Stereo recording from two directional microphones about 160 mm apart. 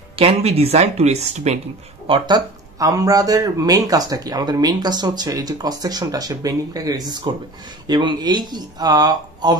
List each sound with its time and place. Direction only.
0.1 s speech: 40° right (ahead or behind)
2.0 s speech: 30° right (ahead or behind)